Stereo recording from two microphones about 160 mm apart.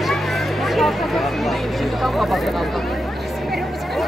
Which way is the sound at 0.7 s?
Centre (ahead or behind).